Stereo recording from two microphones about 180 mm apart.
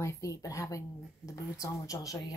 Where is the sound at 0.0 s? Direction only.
15° left (ahead or behind).